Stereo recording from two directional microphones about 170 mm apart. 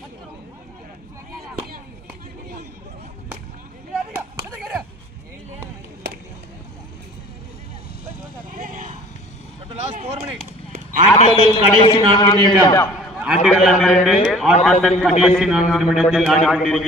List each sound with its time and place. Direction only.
8.5 s vehicle: 50° right (ahead or behind)
9.8 s a sound: 40° right (ahead or behind)
11.1 s a woman's voice: 30° left (ahead or behind)
13.1 s a man's voice: centre (ahead or behind)